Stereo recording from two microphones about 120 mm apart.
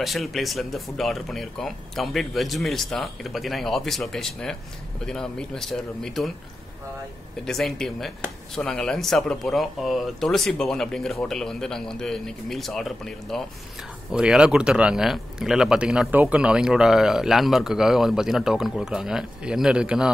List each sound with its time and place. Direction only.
0.0 s speech: centre (ahead or behind)
7.4 s speech: 5° left (ahead or behind)